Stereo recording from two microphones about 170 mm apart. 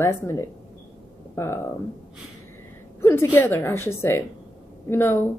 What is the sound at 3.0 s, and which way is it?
A woman's voice, 15° left (ahead or behind).